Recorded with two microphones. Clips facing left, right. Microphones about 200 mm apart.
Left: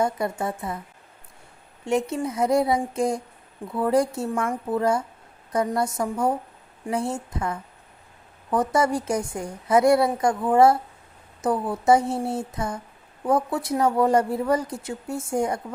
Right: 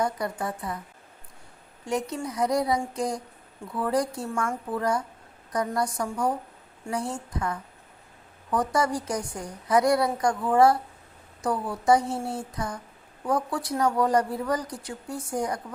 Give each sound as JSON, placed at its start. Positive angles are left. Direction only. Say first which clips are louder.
{"t": 0.0, "sound": "a woman's voice", "louder": "left 3 dB", "side_deg": 25}
{"t": 1.8, "sound": "a woman's voice", "louder": "left 5 dB", "side_deg": 25}